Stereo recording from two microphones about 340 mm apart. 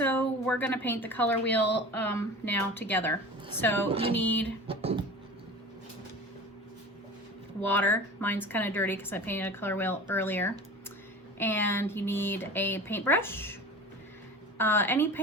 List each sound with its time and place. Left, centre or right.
0.0 s a woman's voice: centre
3.8 s speech: centre
4.1 s a woman's voice: centre
4.6 s speech: centre
7.6 s a woman's voice: centre
14.6 s a woman's voice: centre